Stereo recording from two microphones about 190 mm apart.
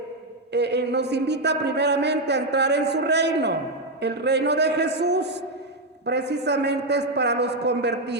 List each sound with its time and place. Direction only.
0.5 s a man's voice: 60° right (ahead or behind)